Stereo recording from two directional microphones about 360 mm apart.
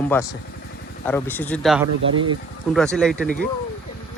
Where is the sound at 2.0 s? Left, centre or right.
Right.